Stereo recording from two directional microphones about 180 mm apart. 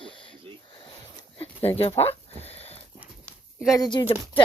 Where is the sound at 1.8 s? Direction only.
35° left (ahead or behind).